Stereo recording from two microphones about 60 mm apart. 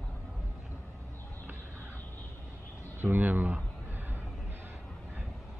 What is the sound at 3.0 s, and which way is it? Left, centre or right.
Speech, right.